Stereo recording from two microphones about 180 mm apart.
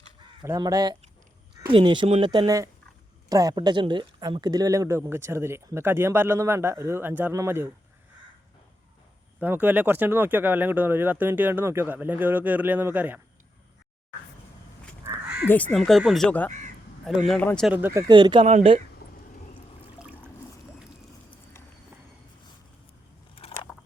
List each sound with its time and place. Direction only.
0.4 s speech: 20° right (ahead or behind)
9.4 s speech: 10° right (ahead or behind)
15.1 s crow: 15° right (ahead or behind)
15.4 s speech: 10° left (ahead or behind)
17.7 s speech: 10° right (ahead or behind)
18.1 s speech: 25° right (ahead or behind)
20.0 s water: 5° right (ahead or behind)
23.3 s a sound: 30° left (ahead or behind)